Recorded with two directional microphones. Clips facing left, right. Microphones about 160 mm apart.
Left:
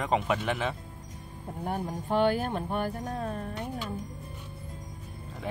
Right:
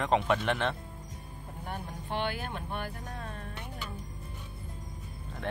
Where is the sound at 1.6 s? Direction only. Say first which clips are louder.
Left 8 dB; 40° left (ahead or behind).